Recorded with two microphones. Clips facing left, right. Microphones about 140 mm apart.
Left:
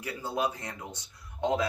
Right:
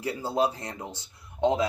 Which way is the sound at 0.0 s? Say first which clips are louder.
Right 5 dB; 30° right (ahead or behind).